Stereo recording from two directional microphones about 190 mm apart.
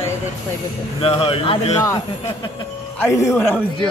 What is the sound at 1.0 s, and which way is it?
Speech, 30° left (ahead or behind).